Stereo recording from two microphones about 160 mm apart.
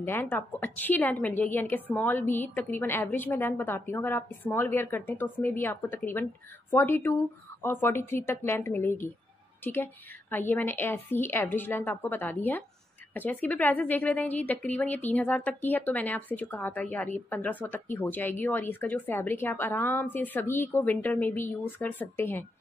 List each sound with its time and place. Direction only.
0.0 s a woman's voice: 10° left (ahead or behind)
10.3 s a woman's voice: 10° left (ahead or behind)